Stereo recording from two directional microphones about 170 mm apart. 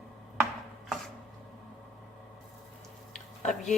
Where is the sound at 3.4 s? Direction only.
45° left (ahead or behind).